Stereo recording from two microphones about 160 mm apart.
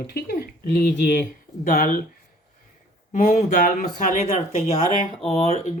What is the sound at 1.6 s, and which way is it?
Speech, 60° left (ahead or behind).